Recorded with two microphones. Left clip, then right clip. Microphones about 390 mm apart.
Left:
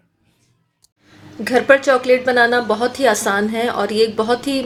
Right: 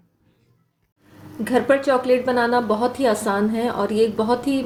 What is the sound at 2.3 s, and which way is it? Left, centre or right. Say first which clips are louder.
A woman's voice: left 5 dB; left.